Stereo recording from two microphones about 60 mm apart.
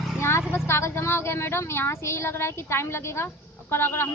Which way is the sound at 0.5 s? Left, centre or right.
Left.